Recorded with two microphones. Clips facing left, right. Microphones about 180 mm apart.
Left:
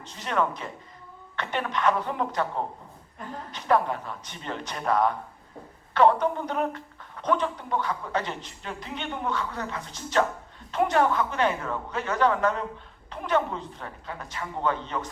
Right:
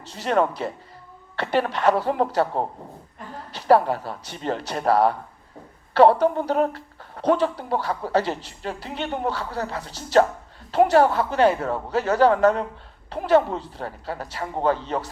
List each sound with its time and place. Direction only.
0.1 s speech: 35° right (ahead or behind)